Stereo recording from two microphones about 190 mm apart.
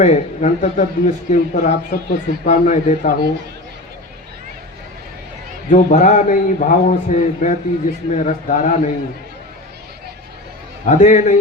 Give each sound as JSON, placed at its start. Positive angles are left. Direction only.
{"t": 0.0, "sound": "speech", "side_deg": 40}
{"t": 5.7, "sound": "speech", "side_deg": 40}
{"t": 10.8, "sound": "speech", "side_deg": 40}